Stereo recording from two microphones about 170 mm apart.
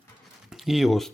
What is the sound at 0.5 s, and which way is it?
Speech, centre (ahead or behind).